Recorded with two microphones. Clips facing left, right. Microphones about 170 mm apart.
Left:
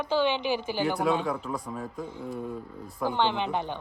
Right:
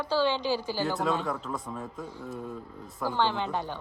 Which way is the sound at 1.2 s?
Centre (ahead or behind).